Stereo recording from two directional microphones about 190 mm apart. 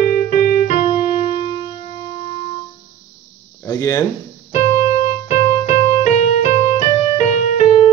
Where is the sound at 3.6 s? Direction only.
15° left (ahead or behind).